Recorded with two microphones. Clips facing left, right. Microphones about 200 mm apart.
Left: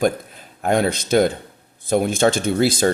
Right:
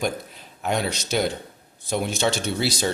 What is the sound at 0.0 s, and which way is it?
Speech, 50° left (ahead or behind).